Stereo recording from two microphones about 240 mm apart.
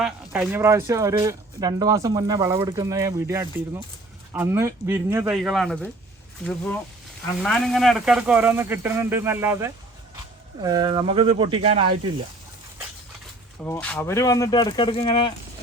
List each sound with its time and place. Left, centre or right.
0.0 s speech: centre
7.4 s speech: centre; by 11.9 s right
13.6 s speech: centre